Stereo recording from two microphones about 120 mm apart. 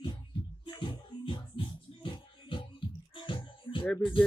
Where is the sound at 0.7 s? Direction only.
40° left (ahead or behind).